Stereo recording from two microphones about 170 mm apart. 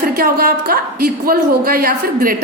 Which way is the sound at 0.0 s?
60° right (ahead or behind).